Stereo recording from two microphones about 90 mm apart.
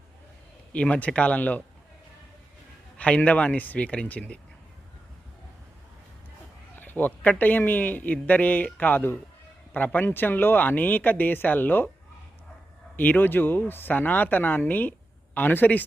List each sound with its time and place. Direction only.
0.7 s speech: 15° left (ahead or behind)
3.0 s speech: 15° left (ahead or behind)
6.7 s a man's voice: 20° left (ahead or behind)
13.0 s a man's voice: 20° left (ahead or behind)